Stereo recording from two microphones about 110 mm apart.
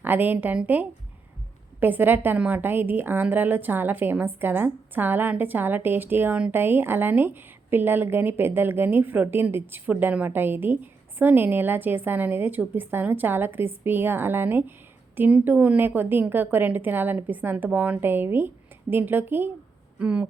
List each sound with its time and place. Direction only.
0.0 s a woman's voice: 15° right (ahead or behind)